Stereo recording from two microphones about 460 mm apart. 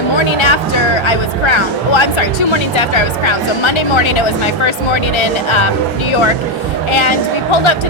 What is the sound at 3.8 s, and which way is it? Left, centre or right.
Speech, left.